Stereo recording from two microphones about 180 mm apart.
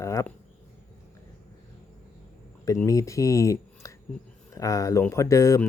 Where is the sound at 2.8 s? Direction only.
15° left (ahead or behind).